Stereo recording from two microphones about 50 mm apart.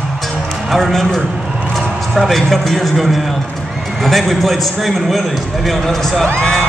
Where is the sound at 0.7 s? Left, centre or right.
Centre.